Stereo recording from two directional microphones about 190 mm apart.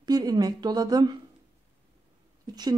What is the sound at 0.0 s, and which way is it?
A woman's voice, 20° right (ahead or behind).